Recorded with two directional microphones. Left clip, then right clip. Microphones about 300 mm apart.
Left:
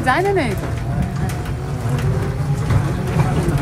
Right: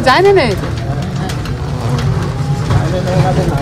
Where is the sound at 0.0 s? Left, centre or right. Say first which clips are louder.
Right 8 dB; right.